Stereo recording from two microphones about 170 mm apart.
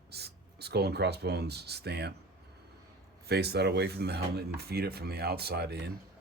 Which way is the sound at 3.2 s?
70° right (ahead or behind).